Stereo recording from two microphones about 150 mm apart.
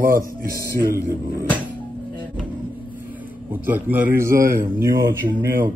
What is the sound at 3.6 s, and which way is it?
Speech, 10° right (ahead or behind).